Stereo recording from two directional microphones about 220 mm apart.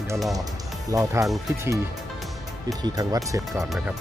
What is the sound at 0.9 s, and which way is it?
Speech, 15° right (ahead or behind).